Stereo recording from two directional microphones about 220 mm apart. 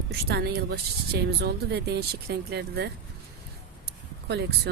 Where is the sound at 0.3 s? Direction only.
45° right (ahead or behind).